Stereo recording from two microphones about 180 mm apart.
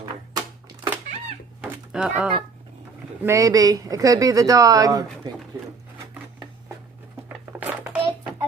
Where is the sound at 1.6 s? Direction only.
5° right (ahead or behind).